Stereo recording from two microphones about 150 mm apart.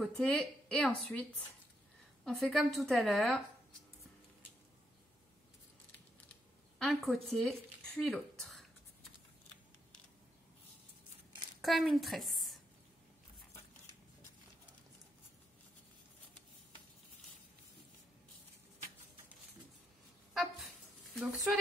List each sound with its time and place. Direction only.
0.0 s speech: 5° left (ahead or behind)
2.2 s speech: centre (ahead or behind)
6.8 s speech: centre (ahead or behind)
11.6 s a woman's voice: centre (ahead or behind)
20.3 s a sound: centre (ahead or behind)